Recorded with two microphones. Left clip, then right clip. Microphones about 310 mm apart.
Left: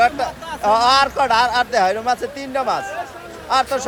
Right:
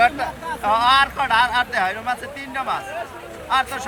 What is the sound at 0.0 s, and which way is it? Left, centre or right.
Speech, centre.